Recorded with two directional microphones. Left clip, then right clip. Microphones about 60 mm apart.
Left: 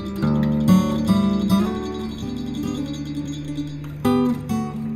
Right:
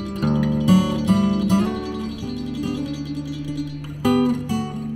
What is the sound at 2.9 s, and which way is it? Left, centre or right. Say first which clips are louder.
Music: even; left.